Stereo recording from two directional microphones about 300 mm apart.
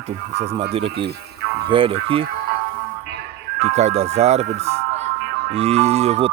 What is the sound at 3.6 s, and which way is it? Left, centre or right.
Speech, right.